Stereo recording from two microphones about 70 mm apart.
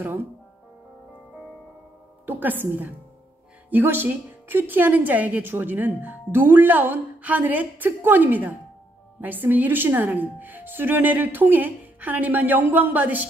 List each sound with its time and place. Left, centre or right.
0.0 s a woman's voice: right
2.2 s a woman's voice: right